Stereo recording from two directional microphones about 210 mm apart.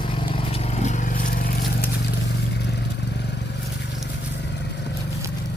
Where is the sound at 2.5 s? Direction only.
55° left (ahead or behind).